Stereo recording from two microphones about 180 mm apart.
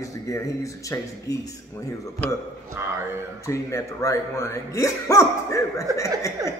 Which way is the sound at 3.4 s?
15° left (ahead or behind).